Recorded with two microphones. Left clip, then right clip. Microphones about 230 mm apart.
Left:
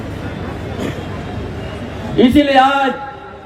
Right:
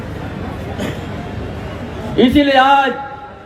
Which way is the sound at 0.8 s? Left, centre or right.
Right.